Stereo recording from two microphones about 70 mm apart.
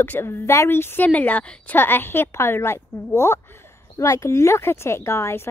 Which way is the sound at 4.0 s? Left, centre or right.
Left.